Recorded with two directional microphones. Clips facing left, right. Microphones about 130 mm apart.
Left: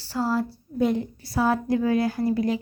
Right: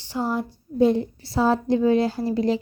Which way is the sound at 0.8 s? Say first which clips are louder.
Right 4 dB; 30° right (ahead or behind).